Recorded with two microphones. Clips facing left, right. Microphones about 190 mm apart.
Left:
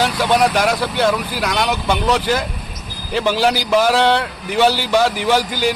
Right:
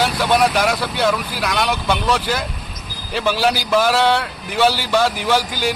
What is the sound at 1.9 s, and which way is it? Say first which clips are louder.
Speech: left 4 dB; 15° left (ahead or behind).